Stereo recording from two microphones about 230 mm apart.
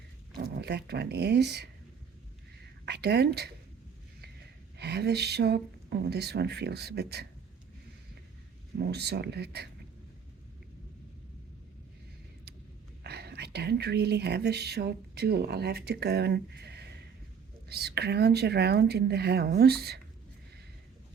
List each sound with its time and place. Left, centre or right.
0.3 s speech: right
2.8 s speech: right
4.8 s speech: right
8.8 s speech: right
13.0 s speech: right